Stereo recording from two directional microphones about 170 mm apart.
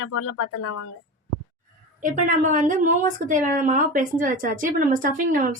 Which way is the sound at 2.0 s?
50° right (ahead or behind).